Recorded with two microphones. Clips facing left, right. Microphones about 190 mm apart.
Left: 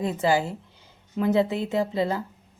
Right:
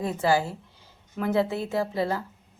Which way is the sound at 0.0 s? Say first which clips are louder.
Left 1 dB; 20° left (ahead or behind).